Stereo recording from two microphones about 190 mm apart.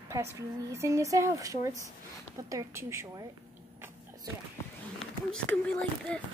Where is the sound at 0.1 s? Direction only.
15° right (ahead or behind).